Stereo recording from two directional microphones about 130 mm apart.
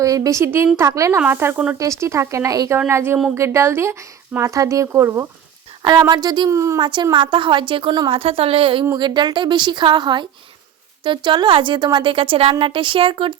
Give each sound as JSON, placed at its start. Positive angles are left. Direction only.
{"t": 0.0, "sound": "speech", "side_deg": -25}
{"t": 5.8, "sound": "a woman's voice", "side_deg": -30}
{"t": 6.8, "sound": "a woman's voice", "side_deg": -35}
{"t": 8.2, "sound": "a woman's voice", "side_deg": -50}